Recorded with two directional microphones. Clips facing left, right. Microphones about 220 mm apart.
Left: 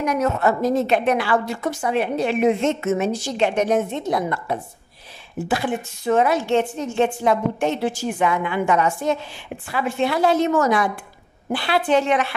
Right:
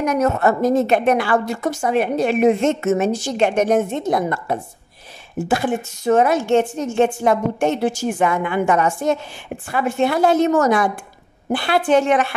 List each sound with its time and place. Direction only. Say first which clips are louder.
0.0 s a woman's voice: right 3 dB; 45° right (ahead or behind)